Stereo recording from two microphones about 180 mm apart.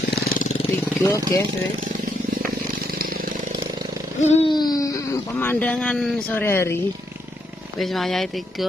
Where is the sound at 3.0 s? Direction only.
55° right (ahead or behind).